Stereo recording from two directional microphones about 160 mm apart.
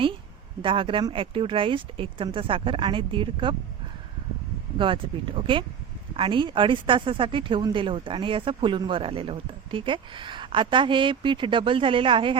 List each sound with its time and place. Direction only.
0.6 s a woman's voice: 35° right (ahead or behind)
4.8 s a woman's voice: 30° right (ahead or behind)